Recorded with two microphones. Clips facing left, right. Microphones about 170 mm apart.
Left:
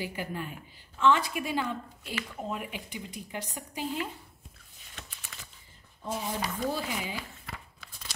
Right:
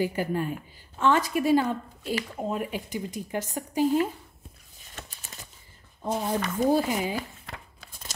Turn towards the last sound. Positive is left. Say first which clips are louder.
# right 9 dB
turn(degrees=-45)  # may be behind; listen again after turning